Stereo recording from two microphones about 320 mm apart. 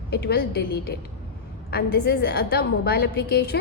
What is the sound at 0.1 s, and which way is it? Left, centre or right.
A woman's voice, left.